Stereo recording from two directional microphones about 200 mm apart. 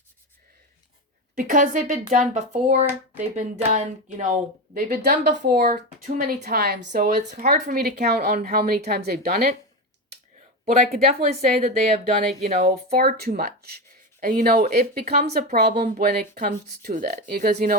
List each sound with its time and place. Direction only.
1.4 s speech: 40° right (ahead or behind)
5.7 s speech: 40° right (ahead or behind)
7.4 s speech: 50° right (ahead or behind)
10.7 s speech: 35° right (ahead or behind)
12.7 s speech: 50° right (ahead or behind)